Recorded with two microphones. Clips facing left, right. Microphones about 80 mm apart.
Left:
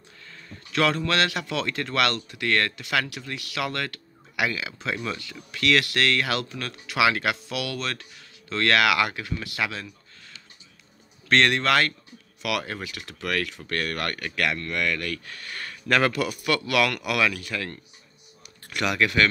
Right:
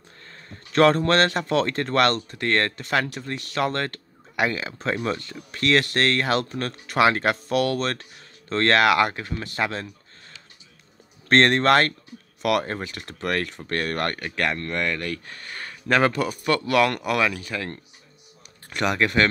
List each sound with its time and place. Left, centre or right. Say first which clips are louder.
0.3 s a man's voice: right 3 dB; right
11.2 s a man's voice: right 4 dB; right